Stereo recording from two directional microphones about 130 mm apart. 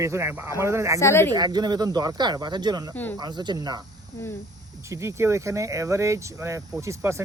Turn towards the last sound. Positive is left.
turn(degrees=-20)  # may be behind; listen again after turning